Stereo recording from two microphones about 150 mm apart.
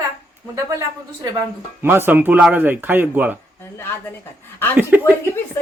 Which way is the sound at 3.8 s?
15° left (ahead or behind).